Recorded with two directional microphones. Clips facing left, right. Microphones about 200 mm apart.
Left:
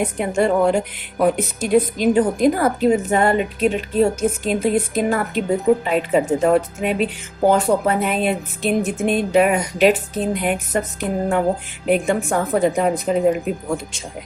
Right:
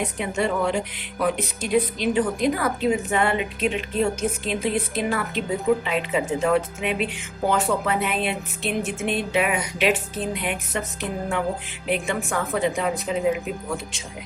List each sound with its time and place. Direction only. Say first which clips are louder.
0.2 s a woman's voice: left 7 dB; 50° left (ahead or behind)
11.9 s a woman's voice: left 7 dB; 45° left (ahead or behind)